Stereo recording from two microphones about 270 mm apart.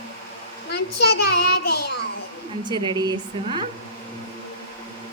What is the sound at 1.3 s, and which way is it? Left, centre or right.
Child singing, left.